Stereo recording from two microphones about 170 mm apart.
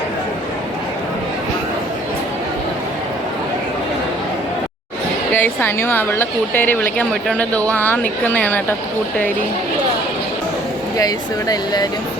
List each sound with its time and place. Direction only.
5.3 s a woman's voice: 10° left (ahead or behind)
10.9 s speech: 20° left (ahead or behind)